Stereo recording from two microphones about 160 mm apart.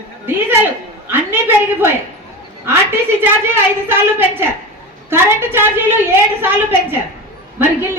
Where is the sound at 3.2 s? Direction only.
15° right (ahead or behind).